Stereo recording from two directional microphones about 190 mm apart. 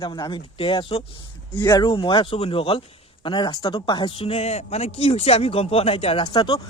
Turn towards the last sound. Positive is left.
turn(degrees=20)  # may be behind; listen again after turning